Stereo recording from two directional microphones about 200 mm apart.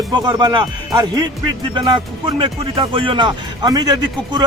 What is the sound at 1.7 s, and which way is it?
Speech, 25° right (ahead or behind).